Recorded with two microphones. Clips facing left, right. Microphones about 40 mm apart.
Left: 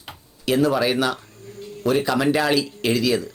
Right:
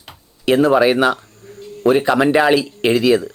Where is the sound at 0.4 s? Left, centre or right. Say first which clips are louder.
Right 6 dB; right.